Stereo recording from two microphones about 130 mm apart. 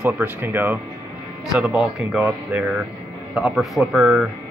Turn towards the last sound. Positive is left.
turn(degrees=-5)  # may be behind; listen again after turning